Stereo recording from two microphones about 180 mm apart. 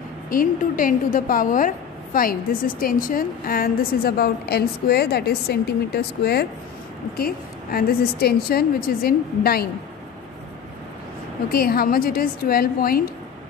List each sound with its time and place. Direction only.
0.3 s a woman's voice: 50° left (ahead or behind)
11.5 s a woman's voice: 55° left (ahead or behind)